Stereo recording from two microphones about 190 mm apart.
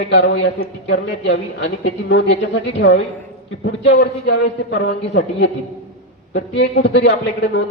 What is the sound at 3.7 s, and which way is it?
A man's voice, 70° left (ahead or behind).